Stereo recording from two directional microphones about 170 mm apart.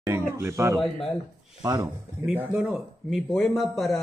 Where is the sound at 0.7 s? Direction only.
Centre (ahead or behind).